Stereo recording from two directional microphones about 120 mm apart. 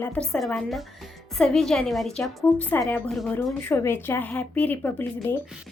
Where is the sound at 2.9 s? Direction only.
15° left (ahead or behind).